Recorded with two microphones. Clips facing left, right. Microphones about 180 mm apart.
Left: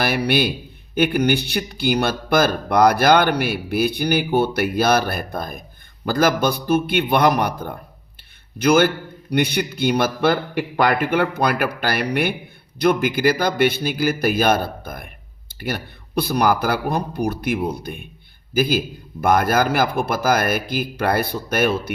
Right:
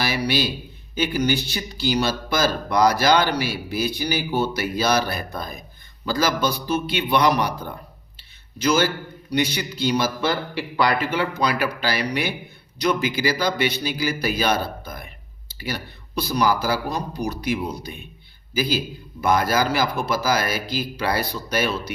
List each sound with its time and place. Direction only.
0.0 s a man's voice: 55° left (ahead or behind)